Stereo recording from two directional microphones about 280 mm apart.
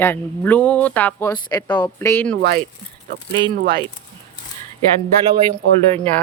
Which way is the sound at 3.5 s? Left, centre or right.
Right.